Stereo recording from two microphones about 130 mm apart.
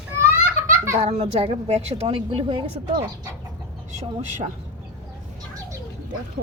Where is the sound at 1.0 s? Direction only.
50° right (ahead or behind).